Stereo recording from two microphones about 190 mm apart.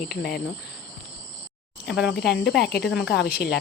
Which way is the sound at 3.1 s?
60° left (ahead or behind).